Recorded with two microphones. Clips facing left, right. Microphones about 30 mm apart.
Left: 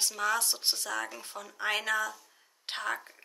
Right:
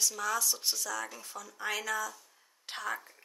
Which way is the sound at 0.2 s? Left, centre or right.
Left.